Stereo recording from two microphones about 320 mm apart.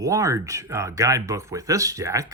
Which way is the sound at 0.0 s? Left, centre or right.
Centre.